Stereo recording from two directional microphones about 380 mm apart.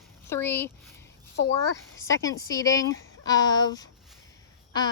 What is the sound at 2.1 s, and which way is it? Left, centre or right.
Speech, centre.